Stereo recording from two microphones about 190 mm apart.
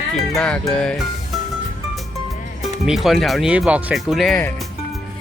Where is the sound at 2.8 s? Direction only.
Centre (ahead or behind).